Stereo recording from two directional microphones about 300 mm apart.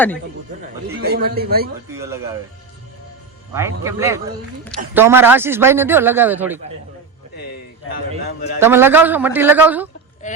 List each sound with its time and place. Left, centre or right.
1.0 s a man's voice: right
2.0 s speech: centre
3.5 s speech: centre
7.3 s a man's voice: left
8.5 s speech: centre
10.2 s a sound: left